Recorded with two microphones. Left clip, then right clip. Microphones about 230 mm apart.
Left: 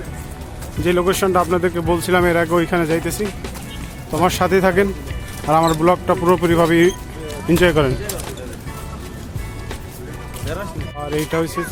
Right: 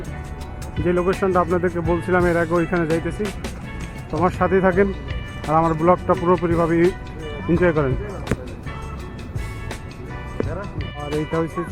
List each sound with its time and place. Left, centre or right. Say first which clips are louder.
0.9 s speech: left 3 dB; left